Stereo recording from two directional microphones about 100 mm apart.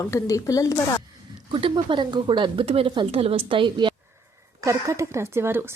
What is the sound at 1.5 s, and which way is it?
Speech, 55° right (ahead or behind).